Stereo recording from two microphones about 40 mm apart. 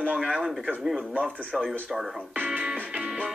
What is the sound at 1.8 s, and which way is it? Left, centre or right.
Speech, centre.